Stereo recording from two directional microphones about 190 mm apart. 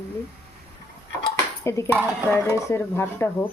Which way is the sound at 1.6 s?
15° left (ahead or behind).